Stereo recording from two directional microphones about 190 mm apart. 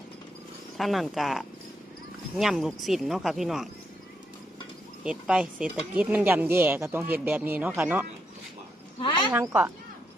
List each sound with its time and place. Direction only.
0.8 s speech: centre (ahead or behind)
5.0 s speech: 5° right (ahead or behind)
9.0 s speech: 25° left (ahead or behind)
9.3 s speech: 10° right (ahead or behind)